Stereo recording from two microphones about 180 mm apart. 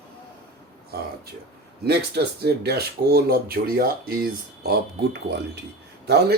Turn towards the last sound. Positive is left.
turn(degrees=-65)  # may be behind; listen again after turning